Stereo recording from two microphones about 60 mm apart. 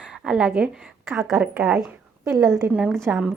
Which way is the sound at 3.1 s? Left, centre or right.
Right.